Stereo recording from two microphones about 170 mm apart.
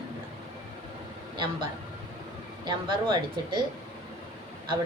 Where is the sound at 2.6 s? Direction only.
25° right (ahead or behind).